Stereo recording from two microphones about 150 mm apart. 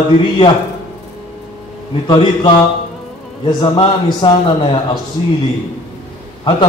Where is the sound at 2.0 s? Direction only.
35° left (ahead or behind).